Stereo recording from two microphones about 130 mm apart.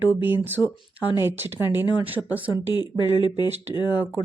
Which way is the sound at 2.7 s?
35° left (ahead or behind).